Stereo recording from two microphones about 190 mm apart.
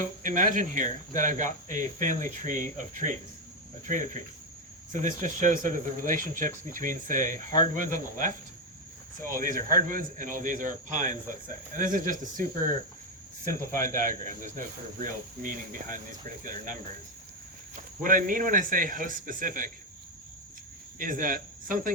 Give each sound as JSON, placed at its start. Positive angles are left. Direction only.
{"t": 0.0, "sound": "speech", "side_deg": -45}
{"t": 13.8, "sound": "speech", "side_deg": -45}
{"t": 17.7, "sound": "speech", "side_deg": -45}
{"t": 21.0, "sound": "speech", "side_deg": -45}